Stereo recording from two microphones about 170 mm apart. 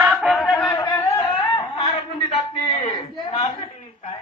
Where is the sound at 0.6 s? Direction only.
20° left (ahead or behind).